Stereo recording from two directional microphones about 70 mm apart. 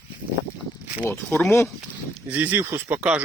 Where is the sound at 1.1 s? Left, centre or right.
Left.